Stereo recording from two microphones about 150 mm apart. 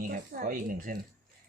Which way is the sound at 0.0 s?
65° right (ahead or behind).